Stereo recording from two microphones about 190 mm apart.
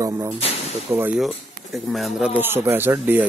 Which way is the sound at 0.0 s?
15° right (ahead or behind).